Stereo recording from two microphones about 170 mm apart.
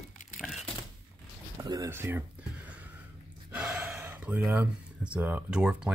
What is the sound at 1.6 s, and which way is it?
Speech, 20° right (ahead or behind).